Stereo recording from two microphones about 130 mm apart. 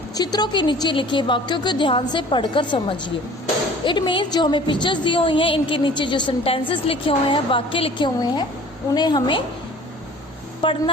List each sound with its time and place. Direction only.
0.2 s a woman's voice: 30° left (ahead or behind)
10.6 s a woman's voice: 40° left (ahead or behind)